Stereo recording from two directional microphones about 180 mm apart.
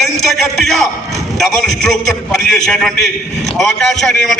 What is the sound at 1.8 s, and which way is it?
A man's voice, centre (ahead or behind).